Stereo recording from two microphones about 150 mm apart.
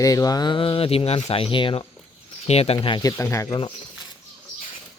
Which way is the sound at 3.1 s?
15° left (ahead or behind).